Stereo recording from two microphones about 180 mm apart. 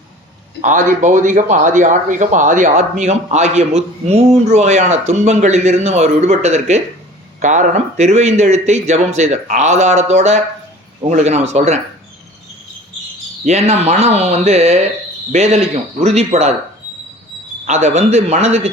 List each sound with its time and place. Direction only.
0.6 s speech: 45° right (ahead or behind)
13.4 s speech: 35° right (ahead or behind)
17.7 s speech: 40° right (ahead or behind)